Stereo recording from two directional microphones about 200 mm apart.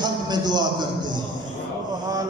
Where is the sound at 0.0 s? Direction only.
20° right (ahead or behind).